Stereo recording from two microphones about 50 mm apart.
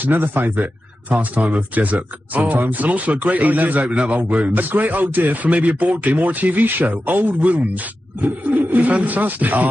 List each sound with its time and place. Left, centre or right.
0.0 s speech: right
1.0 s speech: right